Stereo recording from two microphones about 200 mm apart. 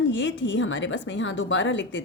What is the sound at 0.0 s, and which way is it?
Speech, 65° left (ahead or behind).